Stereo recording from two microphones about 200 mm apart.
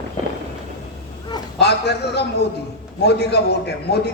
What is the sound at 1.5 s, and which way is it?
A man's voice, 55° left (ahead or behind).